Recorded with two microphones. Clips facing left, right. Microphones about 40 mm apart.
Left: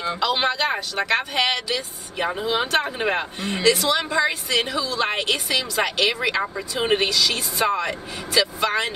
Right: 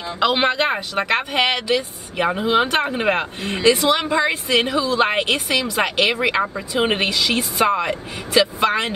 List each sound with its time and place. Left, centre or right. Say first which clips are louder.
0.2 s speech: right 5 dB; right